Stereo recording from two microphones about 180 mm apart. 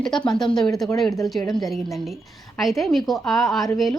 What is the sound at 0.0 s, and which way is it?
A woman's voice, 5° left (ahead or behind).